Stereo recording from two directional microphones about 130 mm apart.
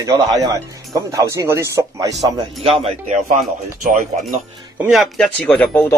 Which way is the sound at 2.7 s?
55° right (ahead or behind).